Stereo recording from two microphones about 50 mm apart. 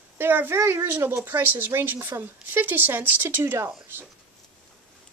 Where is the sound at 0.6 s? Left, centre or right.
Right.